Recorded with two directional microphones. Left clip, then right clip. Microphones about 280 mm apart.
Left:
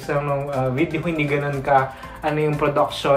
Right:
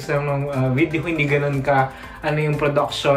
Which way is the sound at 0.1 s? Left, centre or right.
Centre.